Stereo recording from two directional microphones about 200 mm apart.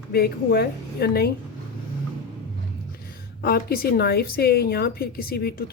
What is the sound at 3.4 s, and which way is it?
A woman's voice, 50° left (ahead or behind).